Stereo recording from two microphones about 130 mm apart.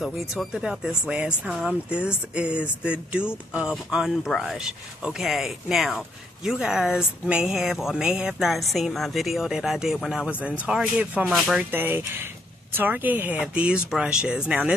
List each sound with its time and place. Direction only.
0.4 s speech: 5° right (ahead or behind)
11.7 s speech: 15° right (ahead or behind)